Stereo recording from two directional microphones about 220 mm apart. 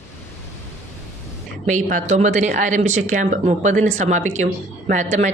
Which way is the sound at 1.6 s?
35° right (ahead or behind).